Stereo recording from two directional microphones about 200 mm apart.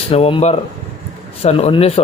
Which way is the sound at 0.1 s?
30° left (ahead or behind).